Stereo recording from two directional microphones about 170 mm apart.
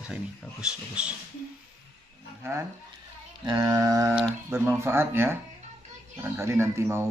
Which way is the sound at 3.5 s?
20° right (ahead or behind).